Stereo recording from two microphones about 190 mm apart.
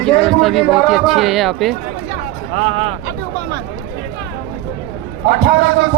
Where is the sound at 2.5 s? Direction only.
30° right (ahead or behind).